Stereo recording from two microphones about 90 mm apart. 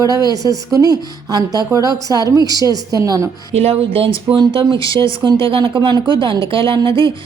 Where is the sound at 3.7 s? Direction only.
90° right.